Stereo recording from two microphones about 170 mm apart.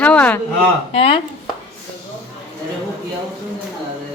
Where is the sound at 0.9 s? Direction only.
35° left (ahead or behind).